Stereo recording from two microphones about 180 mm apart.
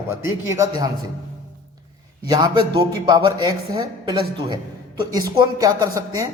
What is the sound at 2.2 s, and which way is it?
A man's voice, 20° right (ahead or behind).